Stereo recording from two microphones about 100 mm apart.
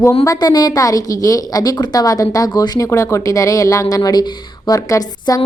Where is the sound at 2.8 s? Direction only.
30° left (ahead or behind).